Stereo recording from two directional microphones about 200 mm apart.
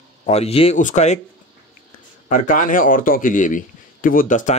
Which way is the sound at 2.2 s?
40° left (ahead or behind).